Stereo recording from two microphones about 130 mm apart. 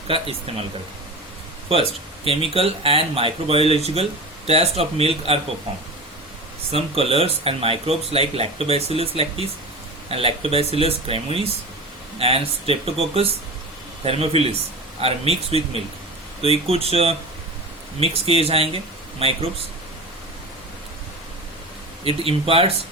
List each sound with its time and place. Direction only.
0.1 s speech: 50° right (ahead or behind)
1.7 s speech: 45° right (ahead or behind)
6.7 s speech: 45° right (ahead or behind)
22.0 s speech: 45° right (ahead or behind)